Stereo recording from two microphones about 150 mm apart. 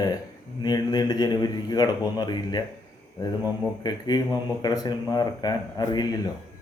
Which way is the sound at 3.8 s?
25° left (ahead or behind).